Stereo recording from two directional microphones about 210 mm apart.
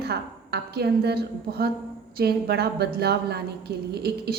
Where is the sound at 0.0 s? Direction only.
50° right (ahead or behind).